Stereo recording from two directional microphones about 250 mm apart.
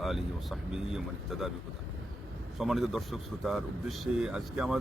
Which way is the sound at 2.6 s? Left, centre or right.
Centre.